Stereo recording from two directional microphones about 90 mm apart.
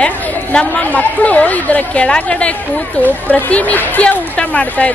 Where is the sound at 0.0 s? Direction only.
15° left (ahead or behind).